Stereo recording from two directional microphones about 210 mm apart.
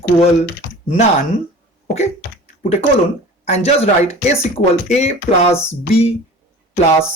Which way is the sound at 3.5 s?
30° left (ahead or behind).